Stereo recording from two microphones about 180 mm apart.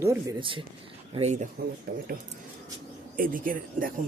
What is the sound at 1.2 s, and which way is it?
Speech, 40° right (ahead or behind).